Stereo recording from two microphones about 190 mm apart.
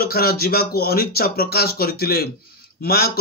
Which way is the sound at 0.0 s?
55° left (ahead or behind).